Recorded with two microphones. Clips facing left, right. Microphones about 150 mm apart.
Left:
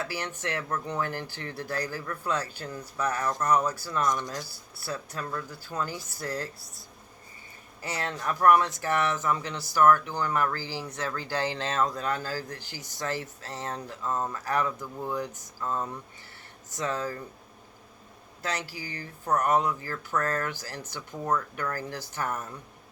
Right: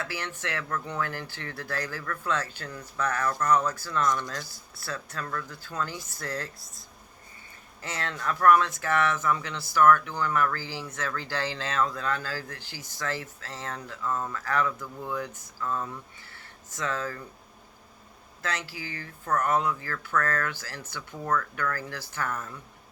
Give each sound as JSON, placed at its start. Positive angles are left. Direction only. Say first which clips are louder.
{"t": 0.2, "sound": "speech", "louder": "left 1 dB", "side_deg": 20}
{"t": 7.8, "sound": "speech", "louder": "left 1 dB", "side_deg": 15}
{"t": 10.7, "sound": "speech", "louder": "left 1 dB", "side_deg": 15}
{"t": 18.7, "sound": "speech", "louder": "right 1 dB", "side_deg": 40}
{"t": 18.9, "sound": "speech", "louder": "left 1 dB", "side_deg": 15}